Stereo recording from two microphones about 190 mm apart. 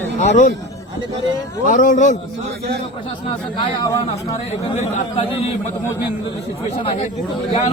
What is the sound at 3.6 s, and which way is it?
Speech, 20° left (ahead or behind).